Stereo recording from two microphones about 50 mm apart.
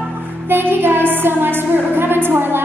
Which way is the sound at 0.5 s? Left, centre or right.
Right.